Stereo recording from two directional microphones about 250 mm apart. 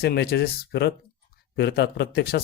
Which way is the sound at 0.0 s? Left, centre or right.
Left.